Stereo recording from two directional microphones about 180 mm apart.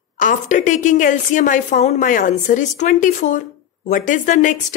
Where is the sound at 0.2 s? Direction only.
45° left (ahead or behind).